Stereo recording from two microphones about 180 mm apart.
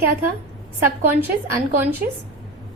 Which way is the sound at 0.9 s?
10° right (ahead or behind).